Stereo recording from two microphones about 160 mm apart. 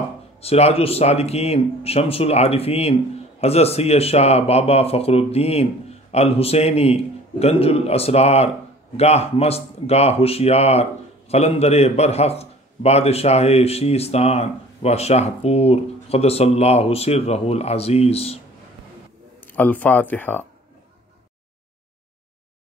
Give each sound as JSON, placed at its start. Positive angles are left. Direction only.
{"t": 0.4, "sound": "speech", "side_deg": 40}
{"t": 19.4, "sound": "speech", "side_deg": 10}